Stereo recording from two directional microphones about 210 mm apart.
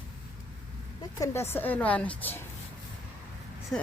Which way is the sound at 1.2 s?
10° left (ahead or behind).